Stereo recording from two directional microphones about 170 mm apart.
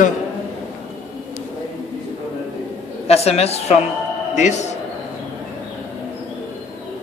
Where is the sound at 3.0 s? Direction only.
35° left (ahead or behind).